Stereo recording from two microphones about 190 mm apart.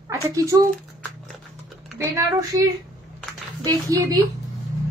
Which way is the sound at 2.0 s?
15° right (ahead or behind).